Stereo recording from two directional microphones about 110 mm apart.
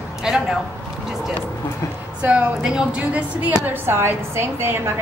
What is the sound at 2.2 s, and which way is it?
A woman's voice, 10° right (ahead or behind).